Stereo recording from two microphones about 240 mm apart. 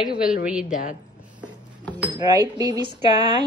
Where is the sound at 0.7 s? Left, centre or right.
Left.